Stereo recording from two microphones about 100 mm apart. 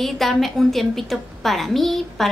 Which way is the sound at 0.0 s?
Centre (ahead or behind).